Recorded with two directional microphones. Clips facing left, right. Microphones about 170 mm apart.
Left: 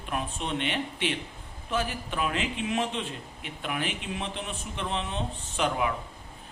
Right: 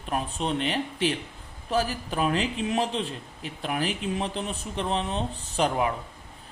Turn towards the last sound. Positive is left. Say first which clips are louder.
# right 3 dB
turn(degrees=-35)  # may be behind; listen again after turning